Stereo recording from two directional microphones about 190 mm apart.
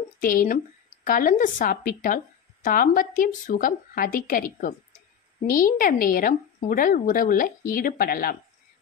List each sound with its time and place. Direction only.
0.2 s a woman's voice: 45° left (ahead or behind)